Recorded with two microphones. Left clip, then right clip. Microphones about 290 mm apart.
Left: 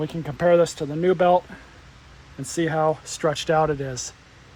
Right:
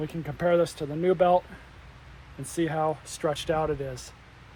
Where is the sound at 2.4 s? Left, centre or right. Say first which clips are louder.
Left 5 dB; left.